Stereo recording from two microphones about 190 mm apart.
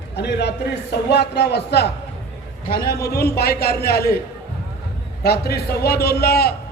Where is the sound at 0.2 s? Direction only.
60° left (ahead or behind).